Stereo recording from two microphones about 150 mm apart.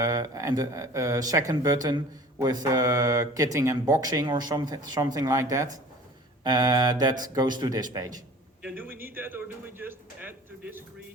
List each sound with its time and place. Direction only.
0.0 s speech: 25° right (ahead or behind)
8.6 s a man's voice: 15° right (ahead or behind)